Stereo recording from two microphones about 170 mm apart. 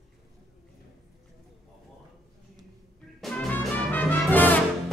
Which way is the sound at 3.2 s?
5° left (ahead or behind).